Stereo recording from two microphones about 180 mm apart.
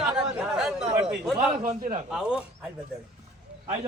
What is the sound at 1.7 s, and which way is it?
Speech, 45° right (ahead or behind).